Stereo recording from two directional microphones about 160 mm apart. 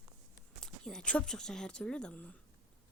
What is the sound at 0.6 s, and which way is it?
Speech, 5° left (ahead or behind).